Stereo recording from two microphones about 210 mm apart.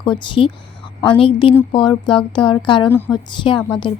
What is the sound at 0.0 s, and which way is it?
A woman's voice, 25° left (ahead or behind).